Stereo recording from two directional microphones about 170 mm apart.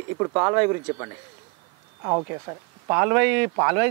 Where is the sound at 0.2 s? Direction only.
25° right (ahead or behind).